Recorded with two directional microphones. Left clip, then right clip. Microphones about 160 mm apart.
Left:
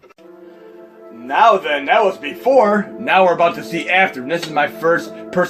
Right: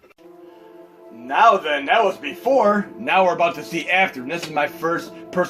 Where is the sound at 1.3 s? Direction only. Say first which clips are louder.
Left 3 dB; 30° left (ahead or behind).